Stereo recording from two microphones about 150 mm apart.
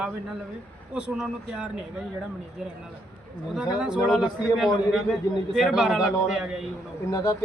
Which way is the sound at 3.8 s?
Centre (ahead or behind).